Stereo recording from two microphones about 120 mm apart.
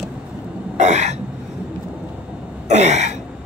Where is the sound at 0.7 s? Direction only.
70° right (ahead or behind).